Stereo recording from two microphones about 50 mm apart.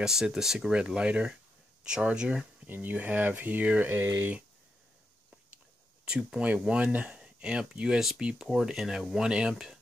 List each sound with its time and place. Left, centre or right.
0.0 s speech: centre
0.7 s speech: centre
2.6 s speech: right
3.9 s speech: right
6.0 s speech: centre